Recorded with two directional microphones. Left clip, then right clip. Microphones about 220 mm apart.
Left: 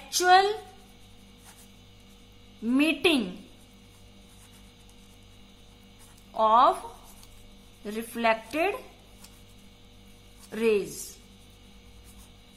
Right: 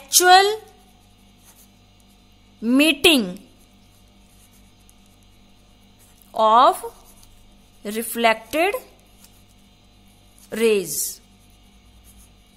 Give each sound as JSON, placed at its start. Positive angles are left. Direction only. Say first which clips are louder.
{"t": 0.2, "sound": "a woman's voice", "louder": "right 7 dB", "side_deg": -40}
{"t": 2.6, "sound": "a woman's voice", "louder": "right 8 dB", "side_deg": -40}
{"t": 6.3, "sound": "a woman's voice", "louder": "right 6 dB", "side_deg": -40}
{"t": 7.8, "sound": "a woman's voice", "louder": "right 7 dB", "side_deg": -40}
{"t": 10.5, "sound": "a woman's voice", "louder": "right 6 dB", "side_deg": -40}